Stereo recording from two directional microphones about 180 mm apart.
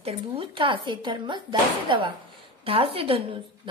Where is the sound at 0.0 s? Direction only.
30° right (ahead or behind).